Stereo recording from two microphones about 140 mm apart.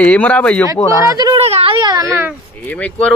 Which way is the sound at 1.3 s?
45° right (ahead or behind).